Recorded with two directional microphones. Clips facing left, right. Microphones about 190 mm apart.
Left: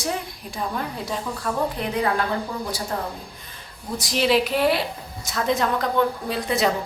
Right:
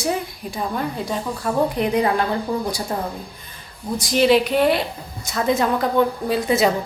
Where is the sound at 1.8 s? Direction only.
15° right (ahead or behind).